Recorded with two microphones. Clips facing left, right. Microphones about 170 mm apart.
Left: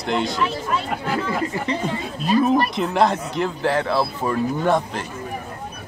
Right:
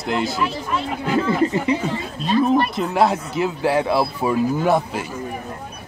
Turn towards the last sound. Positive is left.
turn(degrees=-5)  # may be behind; listen again after turning